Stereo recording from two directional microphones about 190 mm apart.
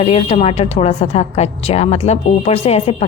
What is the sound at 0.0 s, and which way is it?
A woman's voice, 35° left (ahead or behind).